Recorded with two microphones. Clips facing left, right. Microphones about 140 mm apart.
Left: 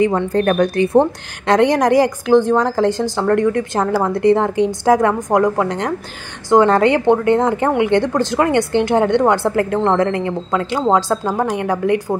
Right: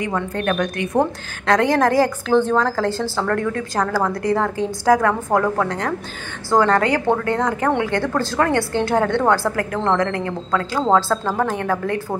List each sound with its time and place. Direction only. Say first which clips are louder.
0.0 s a woman's voice: left 7 dB; 35° left (ahead or behind); by 12.2 s 15° left (ahead or behind)